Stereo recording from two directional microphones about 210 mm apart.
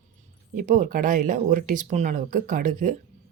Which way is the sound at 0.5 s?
40° right (ahead or behind).